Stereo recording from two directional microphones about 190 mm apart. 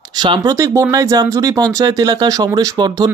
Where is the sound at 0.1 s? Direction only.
20° right (ahead or behind).